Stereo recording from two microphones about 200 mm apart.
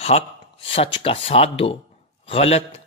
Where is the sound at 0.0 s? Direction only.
30° left (ahead or behind).